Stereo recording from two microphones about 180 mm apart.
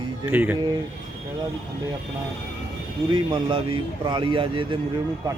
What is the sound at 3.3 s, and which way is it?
Speech, 25° right (ahead or behind).